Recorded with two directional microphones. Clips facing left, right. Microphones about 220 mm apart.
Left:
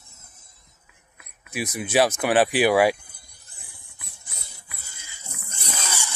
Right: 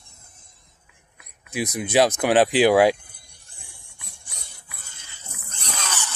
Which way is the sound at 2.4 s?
10° left (ahead or behind).